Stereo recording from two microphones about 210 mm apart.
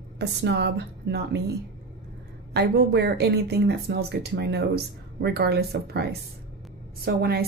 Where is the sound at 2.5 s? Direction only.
50° right (ahead or behind).